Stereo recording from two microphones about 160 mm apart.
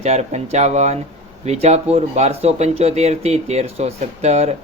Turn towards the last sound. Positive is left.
turn(degrees=-40)  # may be behind; listen again after turning